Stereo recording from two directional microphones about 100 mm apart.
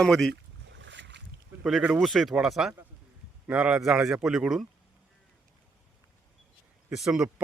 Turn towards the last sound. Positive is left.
turn(degrees=-5)  # may be behind; listen again after turning